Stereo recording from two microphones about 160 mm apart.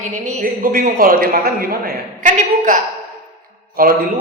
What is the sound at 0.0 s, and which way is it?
A woman's voice, 55° right (ahead or behind).